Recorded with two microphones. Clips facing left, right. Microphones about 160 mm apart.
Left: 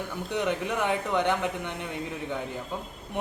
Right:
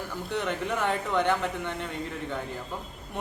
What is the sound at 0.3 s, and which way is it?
A woman's voice, 10° left (ahead or behind).